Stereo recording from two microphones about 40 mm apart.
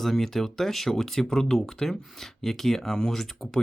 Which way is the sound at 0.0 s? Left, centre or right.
Centre.